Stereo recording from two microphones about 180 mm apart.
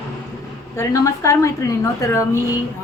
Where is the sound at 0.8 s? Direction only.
15° left (ahead or behind).